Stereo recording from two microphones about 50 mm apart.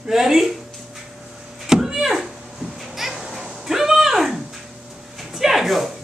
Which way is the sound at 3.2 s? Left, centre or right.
Centre.